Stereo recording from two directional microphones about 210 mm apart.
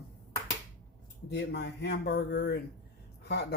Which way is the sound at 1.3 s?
55° left (ahead or behind).